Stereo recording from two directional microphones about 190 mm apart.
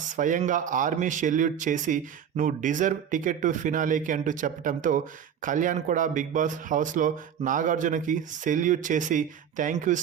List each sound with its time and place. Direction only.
0.2 s speech: 40° right (ahead or behind)